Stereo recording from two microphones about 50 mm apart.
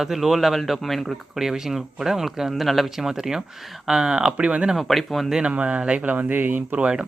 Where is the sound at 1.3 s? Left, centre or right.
Centre.